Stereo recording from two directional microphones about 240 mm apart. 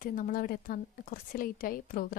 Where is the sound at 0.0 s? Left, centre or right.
Left.